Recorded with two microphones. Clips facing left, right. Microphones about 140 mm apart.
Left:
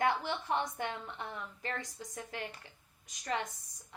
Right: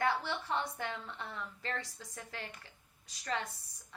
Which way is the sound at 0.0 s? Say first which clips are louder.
Left 2 dB; 20° left (ahead or behind).